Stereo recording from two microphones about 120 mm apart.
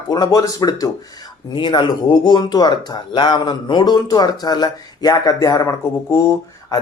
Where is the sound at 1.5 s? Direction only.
40° left (ahead or behind).